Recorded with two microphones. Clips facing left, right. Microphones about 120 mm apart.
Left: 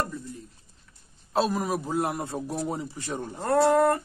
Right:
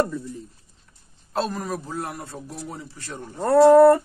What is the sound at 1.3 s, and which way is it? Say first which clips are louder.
A man's voice: left 1 dB; 5° left (ahead or behind).